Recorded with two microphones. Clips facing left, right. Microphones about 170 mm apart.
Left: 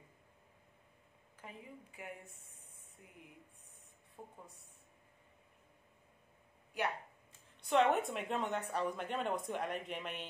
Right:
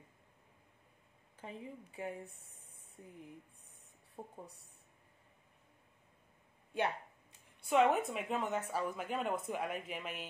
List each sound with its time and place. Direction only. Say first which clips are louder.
1.4 s speech: right 5 dB; 30° right (ahead or behind)
4.2 s speech: right 4 dB; 35° right (ahead or behind)
6.7 s speech: right 2 dB; 25° right (ahead or behind)
7.6 s speech: right 1 dB; 5° right (ahead or behind)